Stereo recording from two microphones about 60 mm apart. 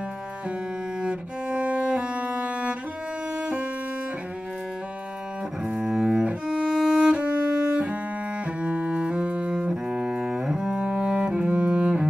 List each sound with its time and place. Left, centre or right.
1.0 s cello: right
3.3 s music: centre
5.7 s double bass: centre
6.2 s cello: centre
6.8 s music: centre
7.1 s music: centre
8.5 s double bass: right
11.1 s music: centre
11.3 s music: centre